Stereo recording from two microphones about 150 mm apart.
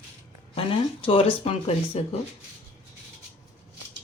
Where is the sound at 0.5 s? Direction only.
35° left (ahead or behind).